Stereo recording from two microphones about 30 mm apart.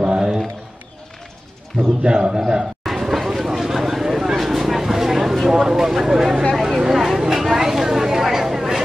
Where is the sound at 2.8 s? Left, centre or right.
Centre.